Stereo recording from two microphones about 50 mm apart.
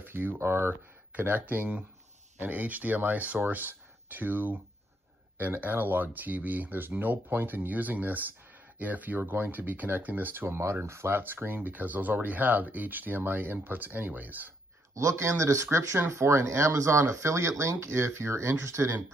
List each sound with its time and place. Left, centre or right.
0.0 s speech: right
1.1 s speech: right
5.6 s speech: right
10.6 s speech: right
11.1 s speech: right
15.0 s speech: right